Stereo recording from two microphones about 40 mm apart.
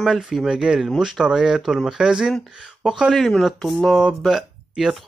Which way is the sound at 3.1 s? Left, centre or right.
Centre.